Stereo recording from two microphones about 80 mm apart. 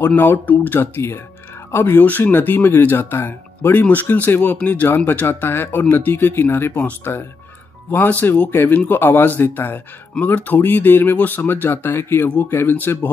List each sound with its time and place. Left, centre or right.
0.0 s speech: left